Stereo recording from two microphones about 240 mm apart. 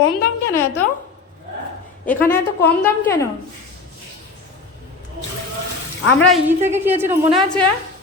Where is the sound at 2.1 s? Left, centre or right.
Centre.